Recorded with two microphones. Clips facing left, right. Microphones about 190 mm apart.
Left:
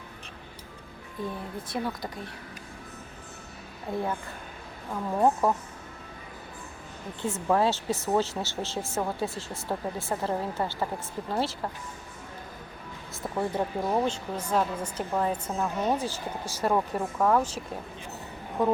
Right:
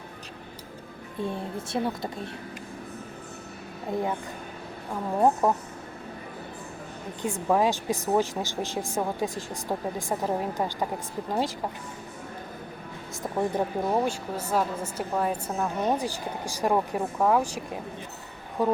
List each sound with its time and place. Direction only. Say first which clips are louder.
1.2 s a woman's voice: right 3 dB; 25° right (ahead or behind)
5.2 s a woman's voice: right 1 dB; 15° right (ahead or behind)
7.2 s a woman's voice: right 1 dB; 15° right (ahead or behind)
13.3 s a woman's voice: right 2 dB; 10° right (ahead or behind)
18.6 s a woman's voice: even; 10° right (ahead or behind)